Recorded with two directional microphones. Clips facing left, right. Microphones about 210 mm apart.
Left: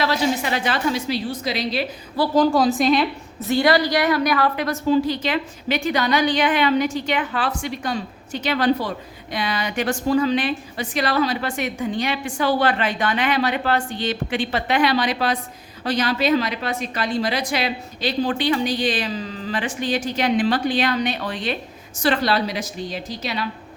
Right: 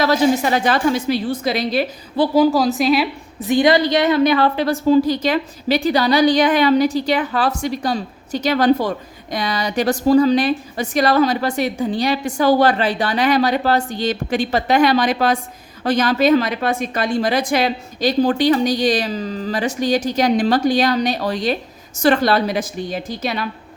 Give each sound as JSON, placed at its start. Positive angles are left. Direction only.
{"t": 0.0, "sound": "a woman's voice", "side_deg": -45}
{"t": 2.3, "sound": "a woman's voice", "side_deg": -5}